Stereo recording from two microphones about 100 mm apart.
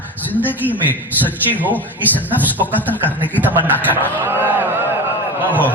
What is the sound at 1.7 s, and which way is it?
A man's voice, 15° left (ahead or behind).